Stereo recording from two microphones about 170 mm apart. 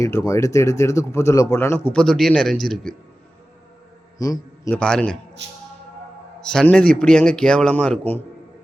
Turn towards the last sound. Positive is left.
turn(degrees=5)  # may be behind; listen again after turning